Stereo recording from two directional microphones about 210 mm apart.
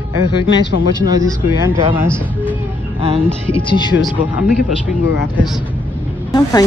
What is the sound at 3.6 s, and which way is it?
Speech, 20° left (ahead or behind).